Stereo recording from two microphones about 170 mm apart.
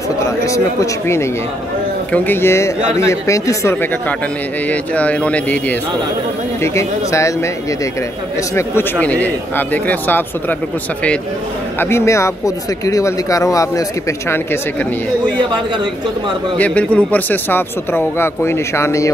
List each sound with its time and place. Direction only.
0.5 s speech: 15° left (ahead or behind)
4.6 s speech: 10° left (ahead or behind)
9.0 s speech: 10° left (ahead or behind)
11.8 s speech: 15° left (ahead or behind)
16.5 s speech: 10° left (ahead or behind)